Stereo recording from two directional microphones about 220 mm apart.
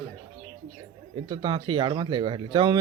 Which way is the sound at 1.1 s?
20° right (ahead or behind).